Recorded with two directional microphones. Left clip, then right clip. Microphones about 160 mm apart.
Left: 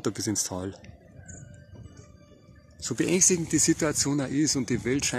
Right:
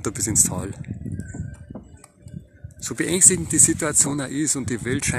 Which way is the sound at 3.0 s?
15° left (ahead or behind).